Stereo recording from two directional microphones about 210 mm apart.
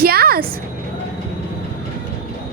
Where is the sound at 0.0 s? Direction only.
45° right (ahead or behind).